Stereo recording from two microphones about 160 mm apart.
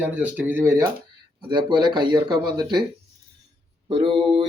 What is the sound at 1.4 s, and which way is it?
Speech, 30° right (ahead or behind).